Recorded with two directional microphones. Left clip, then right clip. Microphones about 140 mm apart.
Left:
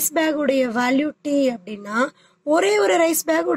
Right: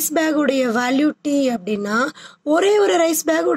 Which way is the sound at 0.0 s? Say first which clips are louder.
Right 2 dB; 45° right (ahead or behind).